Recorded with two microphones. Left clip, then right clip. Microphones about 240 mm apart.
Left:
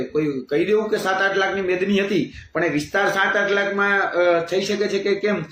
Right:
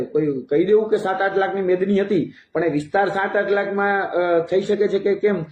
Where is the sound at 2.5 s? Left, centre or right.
Centre.